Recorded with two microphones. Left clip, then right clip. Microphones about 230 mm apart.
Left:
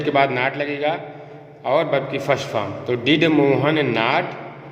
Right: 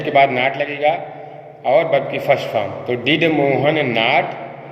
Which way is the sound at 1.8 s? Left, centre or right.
Left.